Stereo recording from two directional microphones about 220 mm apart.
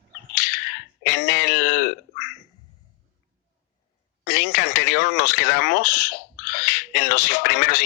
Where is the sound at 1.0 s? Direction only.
45° left (ahead or behind).